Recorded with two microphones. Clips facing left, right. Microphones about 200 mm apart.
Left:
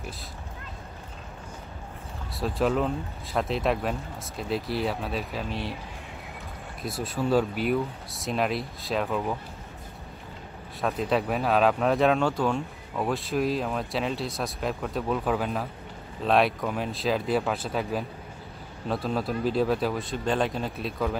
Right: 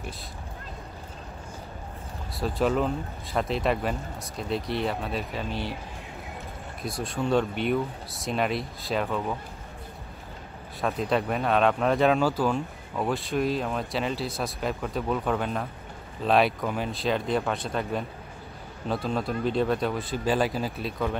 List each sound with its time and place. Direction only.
2.3 s speech: centre (ahead or behind)
6.8 s speech: 5° left (ahead or behind)
10.8 s speech: centre (ahead or behind)